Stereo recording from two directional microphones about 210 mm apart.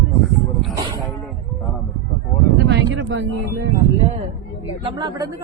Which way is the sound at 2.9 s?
60° right (ahead or behind).